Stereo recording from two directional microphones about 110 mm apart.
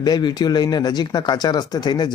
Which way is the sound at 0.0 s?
40° left (ahead or behind).